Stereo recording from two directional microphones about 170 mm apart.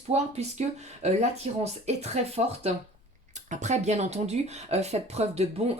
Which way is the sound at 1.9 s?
40° right (ahead or behind).